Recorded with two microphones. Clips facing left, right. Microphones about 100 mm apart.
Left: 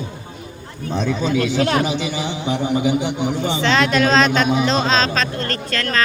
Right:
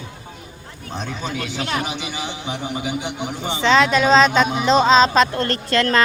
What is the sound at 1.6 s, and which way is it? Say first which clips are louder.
Speech: left 5 dB; 50° left (ahead or behind).